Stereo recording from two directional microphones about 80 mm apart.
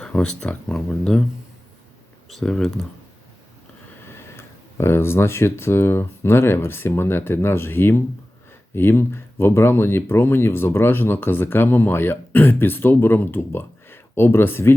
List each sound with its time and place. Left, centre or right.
0.0 s speech: centre
2.3 s speech: centre
4.8 s speech: left